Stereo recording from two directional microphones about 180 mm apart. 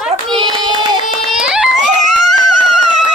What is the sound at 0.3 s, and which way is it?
Hands, 30° right (ahead or behind).